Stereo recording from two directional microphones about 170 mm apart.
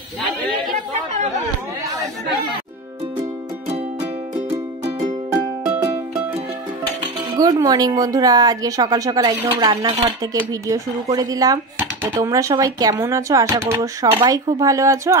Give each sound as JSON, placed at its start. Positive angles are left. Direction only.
{"t": 3.6, "sound": "music", "side_deg": -35}
{"t": 5.3, "sound": "music", "side_deg": -5}
{"t": 7.2, "sound": "speech", "side_deg": -20}